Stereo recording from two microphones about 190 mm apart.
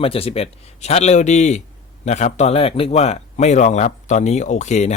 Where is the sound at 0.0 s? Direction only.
30° left (ahead or behind).